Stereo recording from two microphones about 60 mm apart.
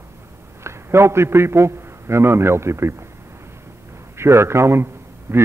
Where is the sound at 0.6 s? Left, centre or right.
Right.